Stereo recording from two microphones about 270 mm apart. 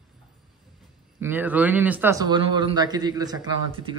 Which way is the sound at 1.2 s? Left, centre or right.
Centre.